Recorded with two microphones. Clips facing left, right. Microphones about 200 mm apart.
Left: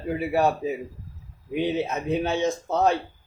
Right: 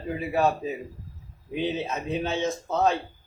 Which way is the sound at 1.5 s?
15° left (ahead or behind).